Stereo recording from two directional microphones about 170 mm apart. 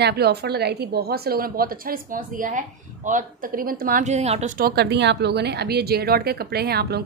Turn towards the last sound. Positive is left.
turn(degrees=-70)  # may be behind; listen again after turning